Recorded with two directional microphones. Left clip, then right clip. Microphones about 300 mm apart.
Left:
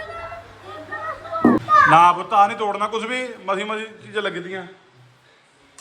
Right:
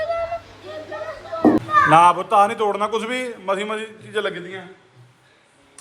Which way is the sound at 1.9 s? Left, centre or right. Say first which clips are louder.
Even; centre.